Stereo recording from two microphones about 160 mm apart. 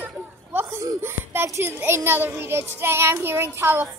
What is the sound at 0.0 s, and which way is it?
A child's voice, 10° right (ahead or behind).